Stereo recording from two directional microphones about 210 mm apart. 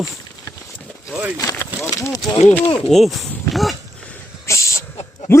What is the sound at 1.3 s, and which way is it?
Speech, 15° left (ahead or behind).